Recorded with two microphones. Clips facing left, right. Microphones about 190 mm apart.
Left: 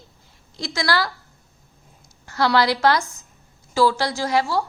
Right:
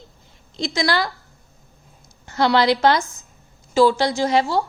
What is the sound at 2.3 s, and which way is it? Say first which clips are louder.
A woman's voice: right 2 dB; 20° right (ahead or behind).